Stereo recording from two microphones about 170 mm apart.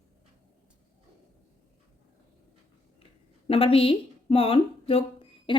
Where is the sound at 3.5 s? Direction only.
35° left (ahead or behind).